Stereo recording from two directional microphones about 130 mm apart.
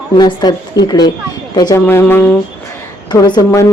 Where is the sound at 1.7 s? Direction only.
20° left (ahead or behind).